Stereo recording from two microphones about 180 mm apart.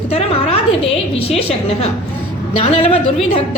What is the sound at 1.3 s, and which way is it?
A woman's voice, 35° left (ahead or behind).